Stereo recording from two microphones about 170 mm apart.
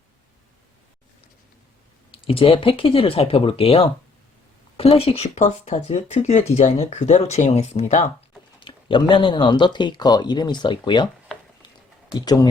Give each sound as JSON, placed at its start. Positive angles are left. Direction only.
{"t": 2.1, "sound": "speech", "side_deg": 30}
{"t": 8.6, "sound": "speech", "side_deg": 30}
{"t": 12.2, "sound": "speech", "side_deg": 25}